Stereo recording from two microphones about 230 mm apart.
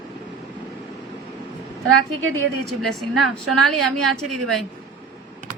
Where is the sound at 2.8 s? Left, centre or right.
Centre.